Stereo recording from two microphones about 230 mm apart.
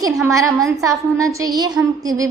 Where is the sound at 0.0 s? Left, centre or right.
Centre.